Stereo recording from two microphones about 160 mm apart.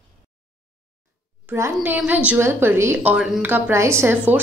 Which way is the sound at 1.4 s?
15° right (ahead or behind).